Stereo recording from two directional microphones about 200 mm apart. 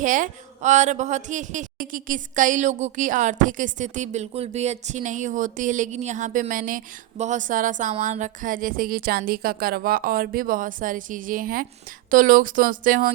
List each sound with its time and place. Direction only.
0.0 s a woman's voice: 40° right (ahead or behind)